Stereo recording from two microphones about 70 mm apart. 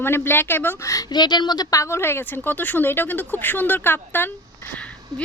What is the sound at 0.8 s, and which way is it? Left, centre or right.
Speech, left.